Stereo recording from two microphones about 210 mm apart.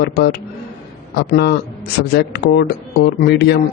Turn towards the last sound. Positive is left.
turn(degrees=55)  # may be behind; listen again after turning